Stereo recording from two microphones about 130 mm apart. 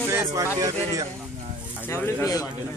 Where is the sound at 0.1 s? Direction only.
20° right (ahead or behind).